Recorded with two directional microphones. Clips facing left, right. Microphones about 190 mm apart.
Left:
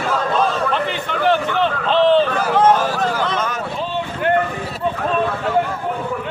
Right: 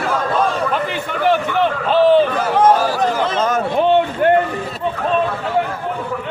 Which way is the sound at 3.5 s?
55° right (ahead or behind).